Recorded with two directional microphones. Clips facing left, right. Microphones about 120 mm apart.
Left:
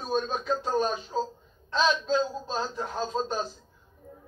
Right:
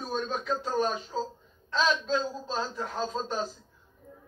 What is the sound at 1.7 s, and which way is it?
A man's voice, 20° left (ahead or behind).